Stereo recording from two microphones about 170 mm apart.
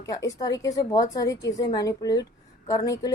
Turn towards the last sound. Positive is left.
turn(degrees=20)  # may be behind; listen again after turning